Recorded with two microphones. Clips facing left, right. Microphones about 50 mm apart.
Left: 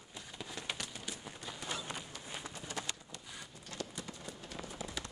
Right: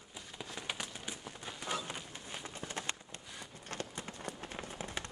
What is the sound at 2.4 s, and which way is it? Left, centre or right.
Run, right.